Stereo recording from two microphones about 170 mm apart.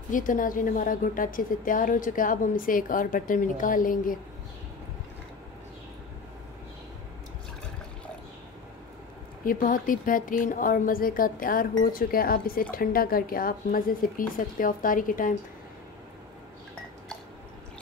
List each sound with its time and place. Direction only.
0.1 s a woman's voice: 50° left (ahead or behind)
9.4 s a woman's voice: 55° left (ahead or behind)